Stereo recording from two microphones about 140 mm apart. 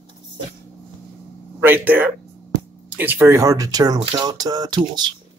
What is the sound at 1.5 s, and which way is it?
Speech, 15° right (ahead or behind).